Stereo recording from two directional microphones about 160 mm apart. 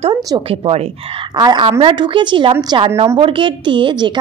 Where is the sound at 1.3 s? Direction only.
25° right (ahead or behind).